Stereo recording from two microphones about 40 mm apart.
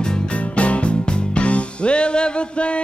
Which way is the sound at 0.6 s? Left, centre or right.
Left.